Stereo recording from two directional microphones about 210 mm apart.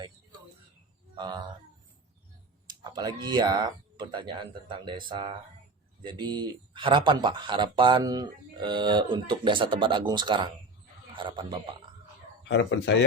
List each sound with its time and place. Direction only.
1.1 s a sound: 20° right (ahead or behind)
2.6 s speech: 20° right (ahead or behind)
12.5 s speech: 55° left (ahead or behind)